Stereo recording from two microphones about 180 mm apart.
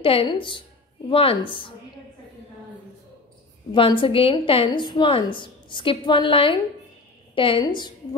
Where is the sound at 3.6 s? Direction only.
30° left (ahead or behind).